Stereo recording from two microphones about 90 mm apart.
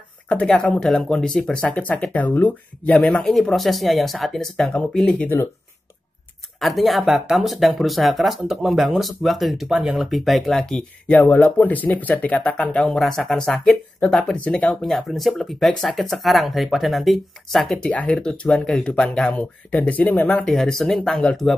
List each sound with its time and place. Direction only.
0.3 s speech: 10° left (ahead or behind)
6.6 s speech: centre (ahead or behind)
11.1 s speech: 15° left (ahead or behind)
14.8 s speech: centre (ahead or behind)
17.8 s speech: 15° left (ahead or behind)
20.4 s speech: 5° left (ahead or behind)